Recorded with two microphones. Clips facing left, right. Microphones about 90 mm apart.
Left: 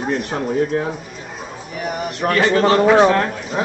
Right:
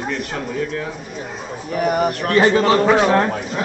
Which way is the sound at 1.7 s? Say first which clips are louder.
Right 7 dB; 50° right (ahead or behind).